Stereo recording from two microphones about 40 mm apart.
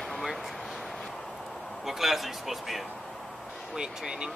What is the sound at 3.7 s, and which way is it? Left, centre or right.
Speech, centre.